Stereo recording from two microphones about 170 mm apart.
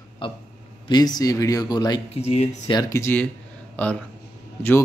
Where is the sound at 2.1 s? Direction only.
40° left (ahead or behind).